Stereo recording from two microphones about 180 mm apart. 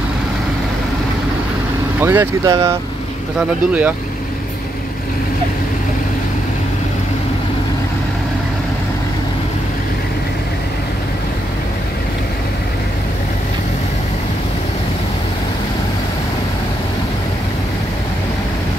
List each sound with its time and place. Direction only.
2.0 s speech: 15° right (ahead or behind)